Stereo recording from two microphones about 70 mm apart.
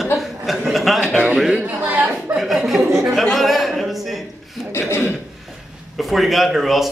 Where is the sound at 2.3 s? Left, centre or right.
Centre.